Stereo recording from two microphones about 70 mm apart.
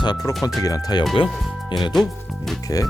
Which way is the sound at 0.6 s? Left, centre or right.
Left.